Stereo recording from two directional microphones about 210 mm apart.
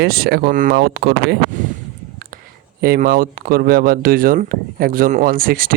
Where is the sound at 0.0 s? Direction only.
50° right (ahead or behind).